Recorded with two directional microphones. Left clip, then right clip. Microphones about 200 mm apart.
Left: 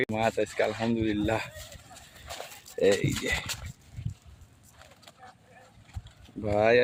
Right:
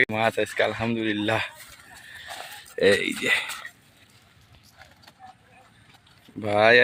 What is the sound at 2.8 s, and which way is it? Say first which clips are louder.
Speech: right 4 dB; centre (ahead or behind).